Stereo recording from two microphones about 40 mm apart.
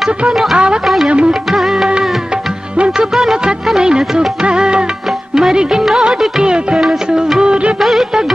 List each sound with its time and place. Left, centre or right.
0.3 s music: centre
1.0 s music: right
1.5 s music: centre
3.6 s music: centre
7.3 s music of bollywood: right
7.8 s music: centre